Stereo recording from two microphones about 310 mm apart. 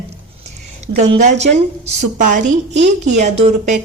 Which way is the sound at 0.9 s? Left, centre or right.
Right.